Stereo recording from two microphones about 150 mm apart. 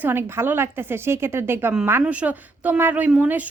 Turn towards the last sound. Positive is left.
turn(degrees=-10)  # may be behind; listen again after turning